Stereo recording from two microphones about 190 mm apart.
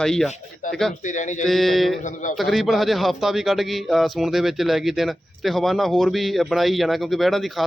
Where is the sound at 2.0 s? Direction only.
40° left (ahead or behind).